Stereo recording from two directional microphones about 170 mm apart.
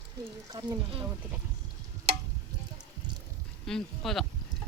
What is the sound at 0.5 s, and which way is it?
Speech, 30° right (ahead or behind).